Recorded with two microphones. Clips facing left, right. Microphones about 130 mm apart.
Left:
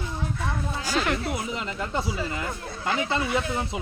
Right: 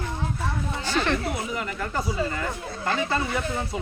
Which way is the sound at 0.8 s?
10° left (ahead or behind).